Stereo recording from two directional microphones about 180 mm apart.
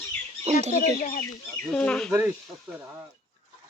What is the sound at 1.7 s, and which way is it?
Speech, 5° left (ahead or behind).